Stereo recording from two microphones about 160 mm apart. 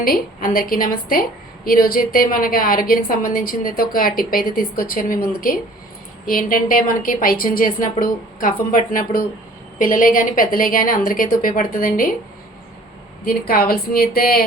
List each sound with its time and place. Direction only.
0.0 s a woman's voice: 65° left (ahead or behind)
13.5 s speech: 70° left (ahead or behind)